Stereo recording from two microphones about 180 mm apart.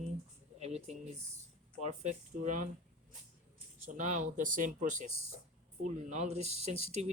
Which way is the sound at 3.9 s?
45° right (ahead or behind).